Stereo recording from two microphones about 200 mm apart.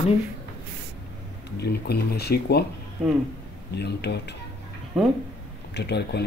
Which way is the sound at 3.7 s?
55° left (ahead or behind).